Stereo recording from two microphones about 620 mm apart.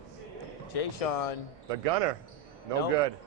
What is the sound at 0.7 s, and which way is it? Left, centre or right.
Speech, left.